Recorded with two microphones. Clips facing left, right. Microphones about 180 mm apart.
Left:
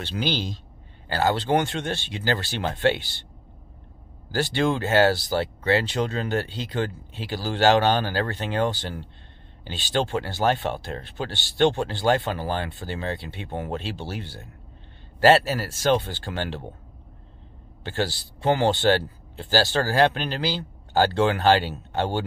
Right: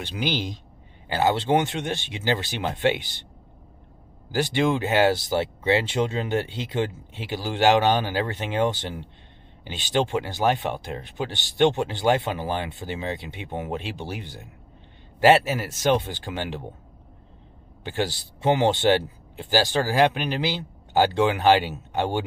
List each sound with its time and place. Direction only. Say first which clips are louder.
0.0 s speech: even; 15° right (ahead or behind)
4.3 s speech: right 1 dB; 20° right (ahead or behind)
17.8 s speech: even; 15° right (ahead or behind)